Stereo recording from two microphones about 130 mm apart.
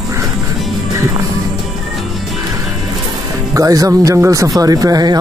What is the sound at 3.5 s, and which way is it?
A man's voice, 25° right (ahead or behind).